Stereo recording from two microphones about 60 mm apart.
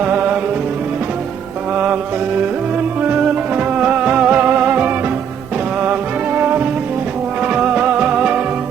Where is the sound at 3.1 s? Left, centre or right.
Right.